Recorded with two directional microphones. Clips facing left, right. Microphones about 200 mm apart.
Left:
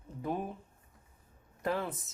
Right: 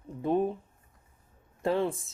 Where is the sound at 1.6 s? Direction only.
25° right (ahead or behind).